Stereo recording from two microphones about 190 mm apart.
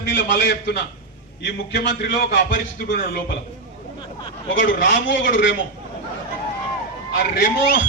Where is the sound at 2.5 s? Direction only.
50° left (ahead or behind).